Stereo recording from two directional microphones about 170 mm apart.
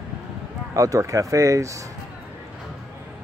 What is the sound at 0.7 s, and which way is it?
Speech, 20° right (ahead or behind).